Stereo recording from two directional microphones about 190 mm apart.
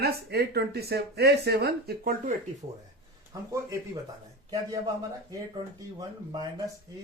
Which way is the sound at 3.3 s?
20° right (ahead or behind).